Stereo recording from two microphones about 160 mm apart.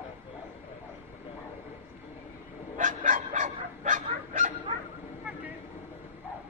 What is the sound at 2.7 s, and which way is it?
Bow-wow, 50° right (ahead or behind).